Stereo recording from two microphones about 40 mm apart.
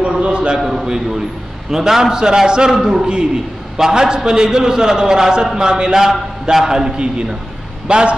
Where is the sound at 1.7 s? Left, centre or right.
Centre.